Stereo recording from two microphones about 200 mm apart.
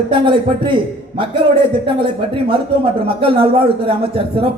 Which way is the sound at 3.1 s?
25° right (ahead or behind).